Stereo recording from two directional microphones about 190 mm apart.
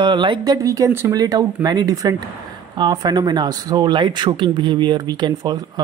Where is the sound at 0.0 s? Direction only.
25° right (ahead or behind).